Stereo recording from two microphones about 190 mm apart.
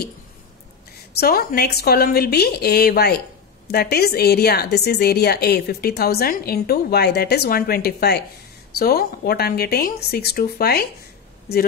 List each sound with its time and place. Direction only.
1.2 s a woman's voice: 55° left (ahead or behind)